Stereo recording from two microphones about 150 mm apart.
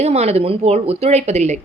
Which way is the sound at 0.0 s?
45° right (ahead or behind).